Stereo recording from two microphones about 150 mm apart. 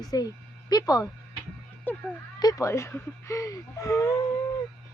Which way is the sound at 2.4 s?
25° left (ahead or behind).